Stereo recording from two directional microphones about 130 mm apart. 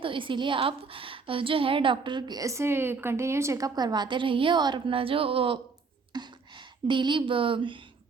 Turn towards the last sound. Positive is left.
turn(degrees=-40)  # may be behind; listen again after turning